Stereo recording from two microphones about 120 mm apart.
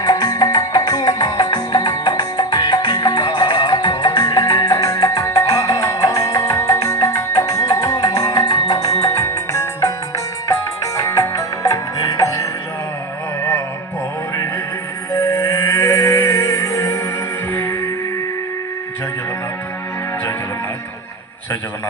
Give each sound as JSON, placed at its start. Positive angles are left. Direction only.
{"t": 0.0, "sound": "music", "side_deg": 30}
{"t": 15.2, "sound": "music", "side_deg": 20}